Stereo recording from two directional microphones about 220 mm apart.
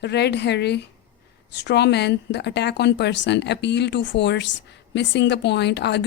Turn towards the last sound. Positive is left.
turn(degrees=50)  # may be behind; listen again after turning